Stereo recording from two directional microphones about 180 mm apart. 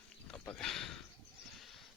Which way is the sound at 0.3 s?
5° left (ahead or behind).